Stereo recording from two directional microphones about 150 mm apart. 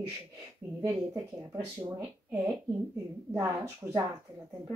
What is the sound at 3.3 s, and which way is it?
Speech, 20° right (ahead or behind).